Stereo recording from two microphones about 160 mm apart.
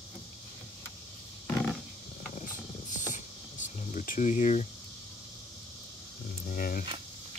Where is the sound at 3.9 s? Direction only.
55° left (ahead or behind).